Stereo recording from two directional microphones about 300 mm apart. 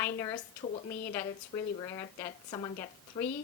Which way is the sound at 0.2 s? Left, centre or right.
Centre.